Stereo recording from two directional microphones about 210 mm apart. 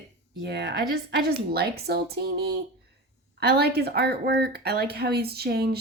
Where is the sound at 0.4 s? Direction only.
55° right (ahead or behind).